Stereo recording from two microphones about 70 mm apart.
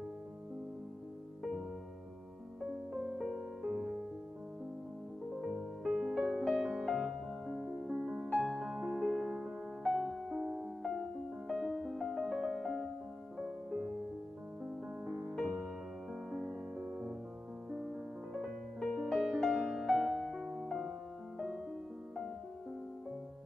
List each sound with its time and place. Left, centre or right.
2.6 s music: centre
5.9 s music: centre
6.4 s music: centre
8.4 s music: centre
15.0 s music: right
16.1 s music: centre
16.4 s music: centre
18.3 s music: centre